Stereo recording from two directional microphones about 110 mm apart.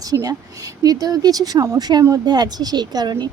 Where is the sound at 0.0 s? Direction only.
35° right (ahead or behind).